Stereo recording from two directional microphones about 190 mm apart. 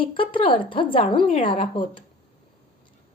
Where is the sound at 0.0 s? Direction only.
25° left (ahead or behind).